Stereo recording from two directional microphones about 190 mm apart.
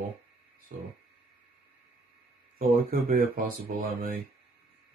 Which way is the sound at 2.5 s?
50° right (ahead or behind).